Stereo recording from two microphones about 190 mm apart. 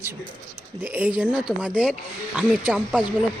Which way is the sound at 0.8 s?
10° right (ahead or behind).